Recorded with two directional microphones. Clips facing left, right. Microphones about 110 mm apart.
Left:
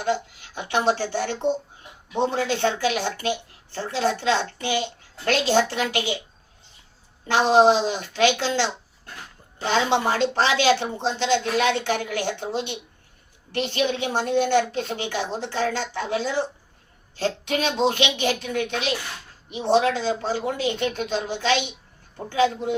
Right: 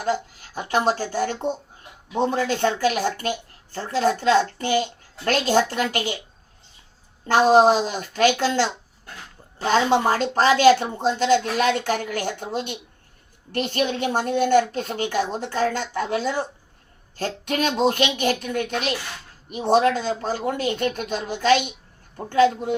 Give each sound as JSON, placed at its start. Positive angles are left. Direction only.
{"t": 0.0, "sound": "speech", "side_deg": -40}
{"t": 7.3, "sound": "speech", "side_deg": -45}
{"t": 9.7, "sound": "speech", "side_deg": -40}